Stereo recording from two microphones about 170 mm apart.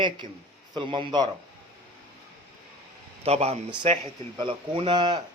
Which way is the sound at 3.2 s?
35° right (ahead or behind).